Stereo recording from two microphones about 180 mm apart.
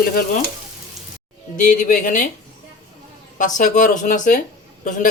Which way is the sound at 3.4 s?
45° left (ahead or behind).